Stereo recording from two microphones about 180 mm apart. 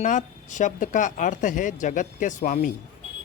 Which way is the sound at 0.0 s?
45° left (ahead or behind).